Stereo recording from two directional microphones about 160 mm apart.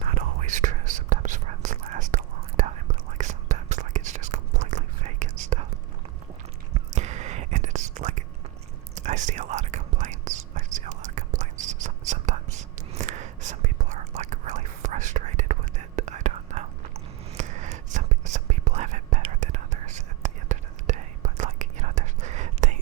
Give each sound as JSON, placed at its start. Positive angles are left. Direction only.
{"t": 0.0, "sound": "whispering", "side_deg": -45}
{"t": 6.7, "sound": "whispering", "side_deg": -45}